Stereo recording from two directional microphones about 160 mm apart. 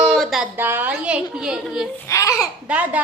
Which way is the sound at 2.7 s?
10° right (ahead or behind).